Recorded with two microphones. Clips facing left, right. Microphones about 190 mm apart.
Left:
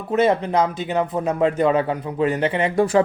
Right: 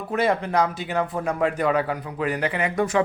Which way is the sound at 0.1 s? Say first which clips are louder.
Left 4 dB; 20° left (ahead or behind).